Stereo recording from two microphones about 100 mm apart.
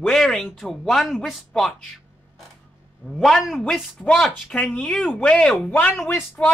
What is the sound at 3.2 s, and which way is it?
Speech, centre (ahead or behind).